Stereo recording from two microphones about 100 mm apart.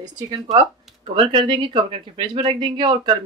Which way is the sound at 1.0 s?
60° right (ahead or behind).